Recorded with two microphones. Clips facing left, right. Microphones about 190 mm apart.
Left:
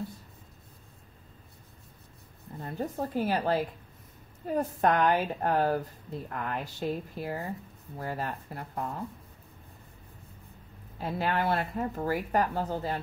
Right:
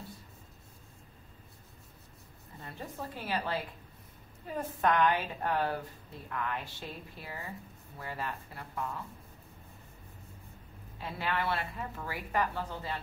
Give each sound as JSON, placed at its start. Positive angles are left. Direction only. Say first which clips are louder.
{"t": 2.6, "sound": "a woman's voice", "louder": "left 9 dB", "side_deg": 40}
{"t": 11.0, "sound": "speech", "louder": "left 5 dB", "side_deg": 45}